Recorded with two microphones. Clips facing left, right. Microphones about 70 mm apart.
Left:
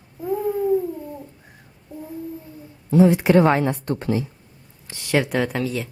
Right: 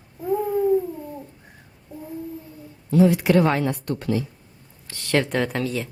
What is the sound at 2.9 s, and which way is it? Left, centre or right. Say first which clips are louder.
A woman's voice: left 2 dB; left.